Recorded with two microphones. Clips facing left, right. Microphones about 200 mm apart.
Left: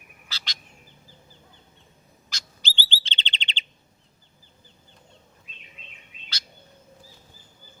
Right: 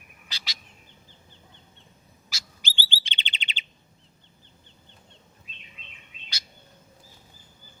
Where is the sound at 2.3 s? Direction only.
10° right (ahead or behind).